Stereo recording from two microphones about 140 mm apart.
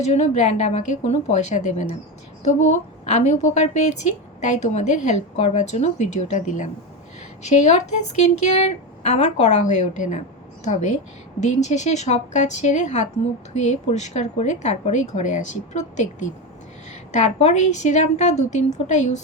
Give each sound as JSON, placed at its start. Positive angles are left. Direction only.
{"t": 0.0, "sound": "a woman's voice", "side_deg": 55}